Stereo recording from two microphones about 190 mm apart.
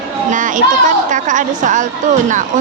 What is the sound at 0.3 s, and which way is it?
A woman's voice, 45° right (ahead or behind).